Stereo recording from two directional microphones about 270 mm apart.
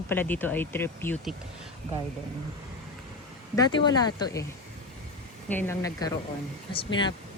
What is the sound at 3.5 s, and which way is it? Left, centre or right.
Speech, centre.